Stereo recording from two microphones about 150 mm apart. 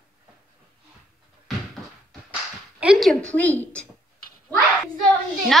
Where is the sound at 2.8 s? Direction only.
5° right (ahead or behind).